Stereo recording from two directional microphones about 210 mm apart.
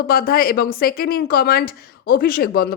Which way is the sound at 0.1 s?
45° left (ahead or behind).